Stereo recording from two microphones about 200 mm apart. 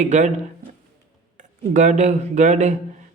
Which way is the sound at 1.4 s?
40° right (ahead or behind).